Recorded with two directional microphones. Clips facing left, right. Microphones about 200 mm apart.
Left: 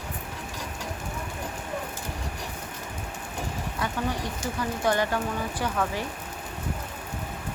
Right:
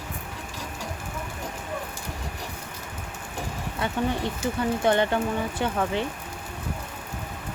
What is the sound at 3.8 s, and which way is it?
Speech, 25° right (ahead or behind).